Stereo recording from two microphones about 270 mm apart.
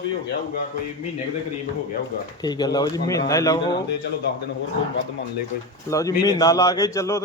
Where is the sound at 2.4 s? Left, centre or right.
Centre.